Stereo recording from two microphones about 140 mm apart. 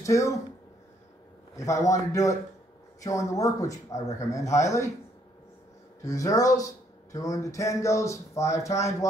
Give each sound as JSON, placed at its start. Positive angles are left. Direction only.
{"t": 0.0, "sound": "speech", "side_deg": 20}
{"t": 1.6, "sound": "speech", "side_deg": 25}
{"t": 6.0, "sound": "speech", "side_deg": 25}